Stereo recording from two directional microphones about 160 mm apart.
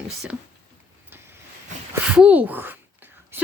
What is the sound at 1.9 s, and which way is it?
Whispering, 5° right (ahead or behind).